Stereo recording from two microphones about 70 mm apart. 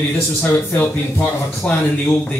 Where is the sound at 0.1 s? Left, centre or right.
Left.